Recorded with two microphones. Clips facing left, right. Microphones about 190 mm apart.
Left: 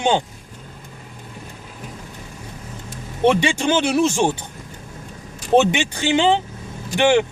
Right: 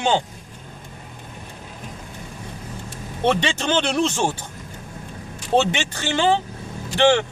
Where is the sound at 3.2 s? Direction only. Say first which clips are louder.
Left 4 dB; 10° left (ahead or behind).